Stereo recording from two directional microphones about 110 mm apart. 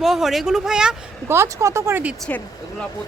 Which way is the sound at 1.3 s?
25° right (ahead or behind).